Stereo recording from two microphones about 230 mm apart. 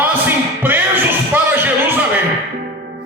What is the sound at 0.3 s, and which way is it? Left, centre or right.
Music, centre.